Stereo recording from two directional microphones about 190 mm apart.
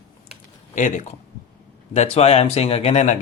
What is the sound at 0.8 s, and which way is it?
Speech, 40° left (ahead or behind).